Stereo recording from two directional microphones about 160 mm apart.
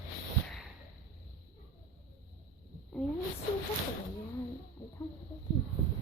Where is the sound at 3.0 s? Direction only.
5° left (ahead or behind).